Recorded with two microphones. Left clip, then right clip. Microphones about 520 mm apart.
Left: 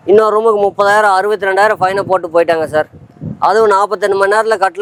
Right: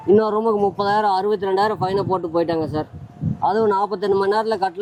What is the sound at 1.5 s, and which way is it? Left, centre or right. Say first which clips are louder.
Speech: left 11 dB; left.